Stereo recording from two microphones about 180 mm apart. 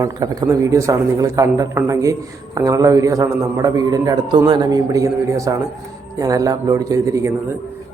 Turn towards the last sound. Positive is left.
turn(degrees=-15)  # may be behind; listen again after turning